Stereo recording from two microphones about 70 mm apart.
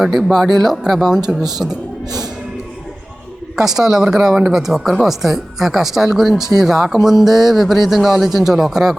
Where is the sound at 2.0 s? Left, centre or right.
Right.